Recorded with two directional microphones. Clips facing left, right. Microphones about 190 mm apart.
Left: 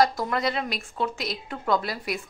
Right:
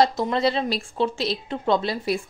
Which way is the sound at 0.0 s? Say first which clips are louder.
Right 3 dB; 25° right (ahead or behind).